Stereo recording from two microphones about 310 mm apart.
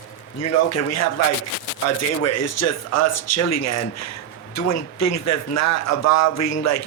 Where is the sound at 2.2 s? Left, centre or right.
Left.